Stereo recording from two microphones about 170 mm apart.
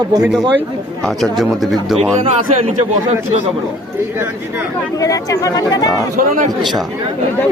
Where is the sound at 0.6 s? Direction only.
Centre (ahead or behind).